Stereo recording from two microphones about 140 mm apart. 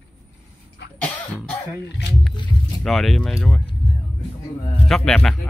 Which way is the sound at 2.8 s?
Centre (ahead or behind).